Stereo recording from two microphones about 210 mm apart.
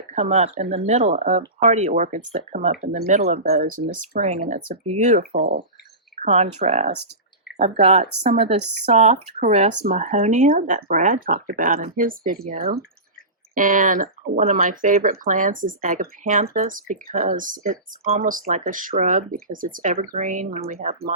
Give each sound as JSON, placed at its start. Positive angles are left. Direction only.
{"t": 0.1, "sound": "speech", "side_deg": -30}
{"t": 6.2, "sound": "a sound", "side_deg": -45}
{"t": 6.6, "sound": "speech", "side_deg": -30}